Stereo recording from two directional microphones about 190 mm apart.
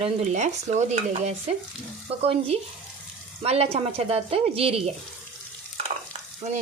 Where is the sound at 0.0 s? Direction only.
35° right (ahead or behind).